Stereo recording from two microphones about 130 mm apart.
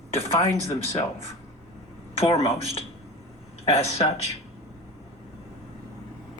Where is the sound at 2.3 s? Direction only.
55° left (ahead or behind).